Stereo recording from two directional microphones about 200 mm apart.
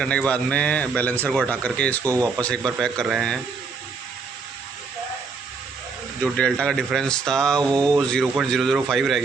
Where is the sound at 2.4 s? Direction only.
5° left (ahead or behind).